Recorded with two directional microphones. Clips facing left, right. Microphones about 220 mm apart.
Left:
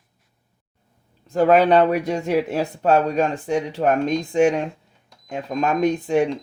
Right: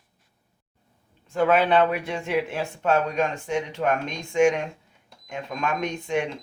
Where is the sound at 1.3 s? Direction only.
40° left (ahead or behind).